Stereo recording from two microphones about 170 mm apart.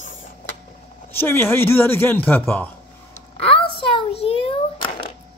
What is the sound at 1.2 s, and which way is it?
Speech, 15° left (ahead or behind).